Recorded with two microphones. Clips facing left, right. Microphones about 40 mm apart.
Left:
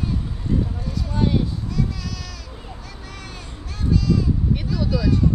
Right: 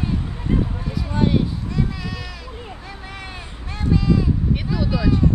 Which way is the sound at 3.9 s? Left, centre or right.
Right.